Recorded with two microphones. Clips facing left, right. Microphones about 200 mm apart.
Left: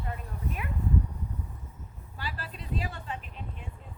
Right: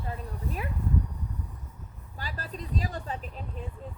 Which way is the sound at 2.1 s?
40° right (ahead or behind).